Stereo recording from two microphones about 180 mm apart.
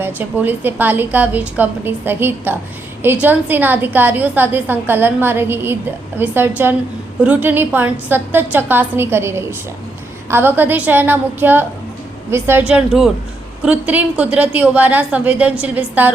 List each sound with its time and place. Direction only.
0.0 s a woman's voice: 10° right (ahead or behind)